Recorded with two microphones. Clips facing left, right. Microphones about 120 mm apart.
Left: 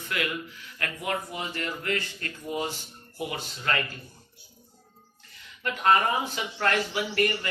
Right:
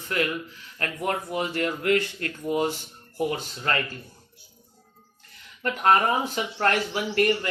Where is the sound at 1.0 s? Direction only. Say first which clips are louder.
Right 5 dB; 50° right (ahead or behind).